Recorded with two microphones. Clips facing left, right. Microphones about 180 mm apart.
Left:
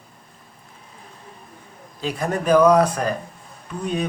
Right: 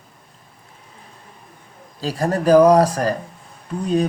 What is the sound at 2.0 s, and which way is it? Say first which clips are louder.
Speech: right 3 dB; 35° right (ahead or behind).